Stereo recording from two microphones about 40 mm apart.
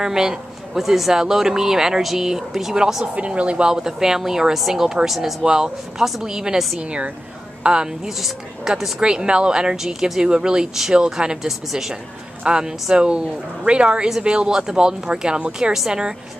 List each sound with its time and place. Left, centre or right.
0.0 s speech: centre
3.2 s speech: right
3.6 s speech: centre
6.8 s speech: right
8.2 s speech: centre
9.0 s speech: right
11.4 s speech: centre